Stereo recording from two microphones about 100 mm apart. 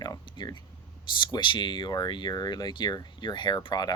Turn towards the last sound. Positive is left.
turn(degrees=45)  # may be behind; listen again after turning